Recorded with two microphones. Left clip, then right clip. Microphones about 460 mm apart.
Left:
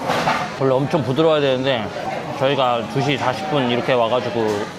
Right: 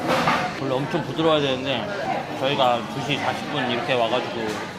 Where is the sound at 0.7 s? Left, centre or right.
Left.